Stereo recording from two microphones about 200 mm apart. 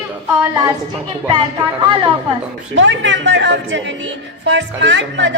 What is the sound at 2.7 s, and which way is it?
A woman's voice, 70° right (ahead or behind).